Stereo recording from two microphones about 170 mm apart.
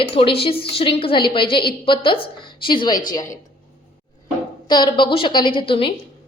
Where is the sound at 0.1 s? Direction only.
35° left (ahead or behind).